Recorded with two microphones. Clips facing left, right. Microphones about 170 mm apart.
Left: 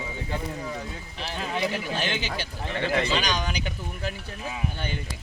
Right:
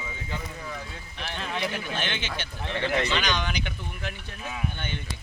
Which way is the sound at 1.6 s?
30° left (ahead or behind).